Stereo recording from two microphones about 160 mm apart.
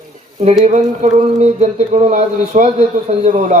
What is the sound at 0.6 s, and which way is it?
Speech, 45° right (ahead or behind).